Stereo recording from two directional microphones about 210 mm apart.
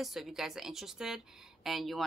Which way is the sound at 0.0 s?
Centre (ahead or behind).